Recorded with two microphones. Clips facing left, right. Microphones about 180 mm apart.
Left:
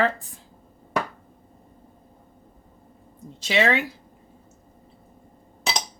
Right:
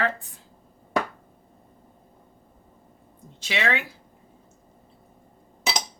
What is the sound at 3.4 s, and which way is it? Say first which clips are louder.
Speech: left 5 dB; 35° left (ahead or behind).